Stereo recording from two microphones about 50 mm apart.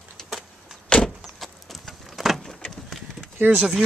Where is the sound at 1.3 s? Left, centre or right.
Centre.